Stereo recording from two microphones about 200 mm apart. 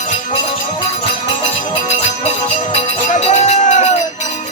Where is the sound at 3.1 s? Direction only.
35° left (ahead or behind).